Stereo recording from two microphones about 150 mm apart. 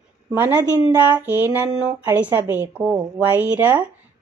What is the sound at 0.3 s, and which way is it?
A woman's voice, 15° right (ahead or behind).